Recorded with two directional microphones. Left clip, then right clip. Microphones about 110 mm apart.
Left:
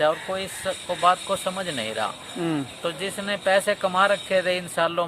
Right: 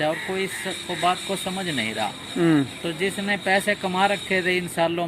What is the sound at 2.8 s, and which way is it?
Speech, 30° left (ahead or behind).